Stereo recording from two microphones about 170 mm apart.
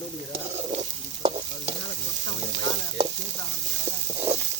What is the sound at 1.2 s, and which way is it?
Stir, 30° right (ahead or behind).